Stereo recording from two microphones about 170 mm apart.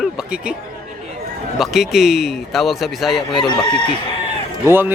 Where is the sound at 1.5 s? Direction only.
Centre (ahead or behind).